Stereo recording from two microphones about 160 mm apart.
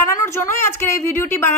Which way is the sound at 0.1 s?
15° left (ahead or behind).